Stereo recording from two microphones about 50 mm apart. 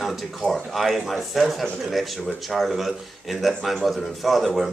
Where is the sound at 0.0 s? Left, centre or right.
Centre.